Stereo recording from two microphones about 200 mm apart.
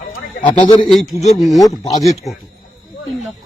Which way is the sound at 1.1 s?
35° left (ahead or behind).